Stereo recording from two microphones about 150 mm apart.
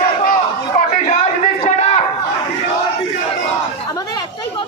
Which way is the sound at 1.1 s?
50° left (ahead or behind).